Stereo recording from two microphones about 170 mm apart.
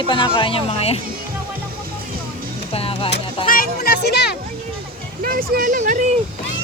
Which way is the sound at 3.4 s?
55° left (ahead or behind).